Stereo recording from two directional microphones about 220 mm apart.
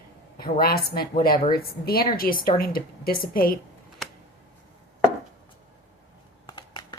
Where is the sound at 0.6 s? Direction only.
45° left (ahead or behind).